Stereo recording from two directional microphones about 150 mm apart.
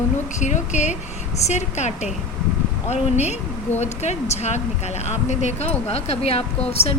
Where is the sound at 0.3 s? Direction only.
55° left (ahead or behind).